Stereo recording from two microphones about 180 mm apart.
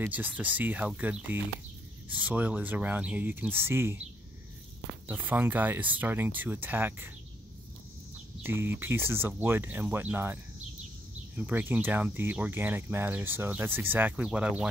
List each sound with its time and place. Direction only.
0.0 s speech: 10° right (ahead or behind)
5.0 s speech: 10° right (ahead or behind)
8.4 s speech: 15° right (ahead or behind)